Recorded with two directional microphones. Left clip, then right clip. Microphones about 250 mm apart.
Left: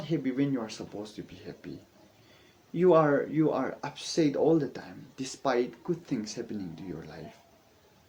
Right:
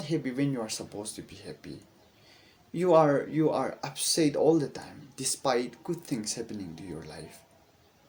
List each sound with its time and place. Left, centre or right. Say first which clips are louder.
0.0 s speech: even; right
2.7 s speech: even; right